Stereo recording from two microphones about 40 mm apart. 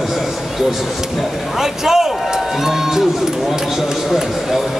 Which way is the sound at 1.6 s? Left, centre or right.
Centre.